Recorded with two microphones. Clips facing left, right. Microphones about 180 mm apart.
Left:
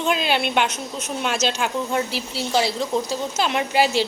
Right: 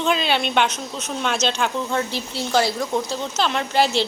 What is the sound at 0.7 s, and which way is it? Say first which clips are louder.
Speech: even; 50° left (ahead or behind).